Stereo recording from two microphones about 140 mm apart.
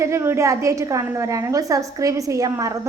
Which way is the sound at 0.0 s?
20° right (ahead or behind).